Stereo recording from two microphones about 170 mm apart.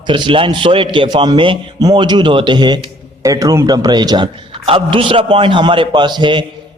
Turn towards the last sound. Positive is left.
turn(degrees=-30)  # may be behind; listen again after turning